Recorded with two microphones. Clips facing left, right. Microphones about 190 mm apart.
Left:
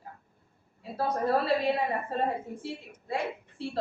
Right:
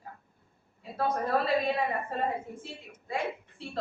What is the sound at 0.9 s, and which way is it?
Speech, 30° left (ahead or behind).